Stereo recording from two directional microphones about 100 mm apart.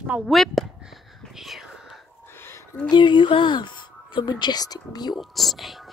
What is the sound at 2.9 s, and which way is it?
Speech, 50° left (ahead or behind).